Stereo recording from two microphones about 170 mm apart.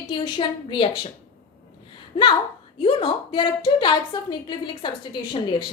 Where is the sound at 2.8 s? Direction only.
35° left (ahead or behind).